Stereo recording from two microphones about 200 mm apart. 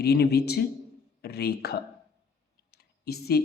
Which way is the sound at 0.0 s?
50° left (ahead or behind).